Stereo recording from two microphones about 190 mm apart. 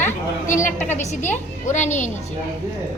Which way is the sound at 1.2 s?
10° left (ahead or behind).